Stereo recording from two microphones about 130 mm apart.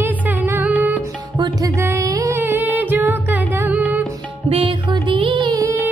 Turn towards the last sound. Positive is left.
turn(degrees=-30)  # may be behind; listen again after turning